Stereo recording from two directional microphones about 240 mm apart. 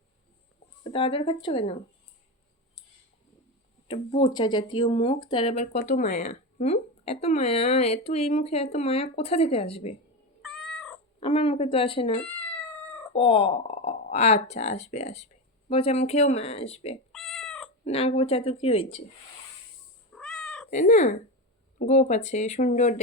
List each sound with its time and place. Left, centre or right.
0.9 s speech: left
3.8 s speech: left
10.4 s cat: centre
11.2 s speech: left
13.1 s speech: left
17.1 s cat: centre
17.8 s speech: left
20.1 s cat: centre
20.7 s speech: left